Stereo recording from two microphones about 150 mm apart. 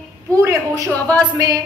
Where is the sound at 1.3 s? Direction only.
30° right (ahead or behind).